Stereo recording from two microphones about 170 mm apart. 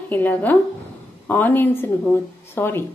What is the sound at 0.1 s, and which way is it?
Speech, 10° left (ahead or behind).